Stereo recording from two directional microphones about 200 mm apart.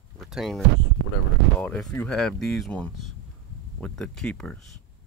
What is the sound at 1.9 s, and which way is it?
Speech, 5° left (ahead or behind).